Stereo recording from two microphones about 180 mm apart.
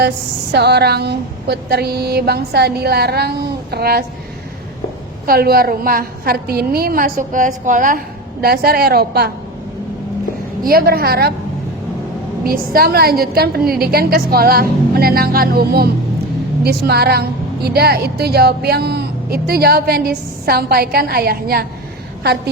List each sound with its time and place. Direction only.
0.5 s a woman's voice: 65° right (ahead or behind)
5.2 s a woman's voice: 55° right (ahead or behind)
10.6 s a woman's voice: 55° right (ahead or behind)
12.5 s a woman's voice: 55° right (ahead or behind)